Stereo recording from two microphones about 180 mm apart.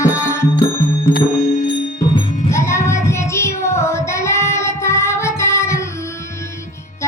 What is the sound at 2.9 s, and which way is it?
Child singing, 15° left (ahead or behind).